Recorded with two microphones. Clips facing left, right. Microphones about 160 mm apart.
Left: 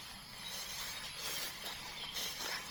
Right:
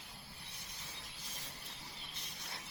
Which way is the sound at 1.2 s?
90° left.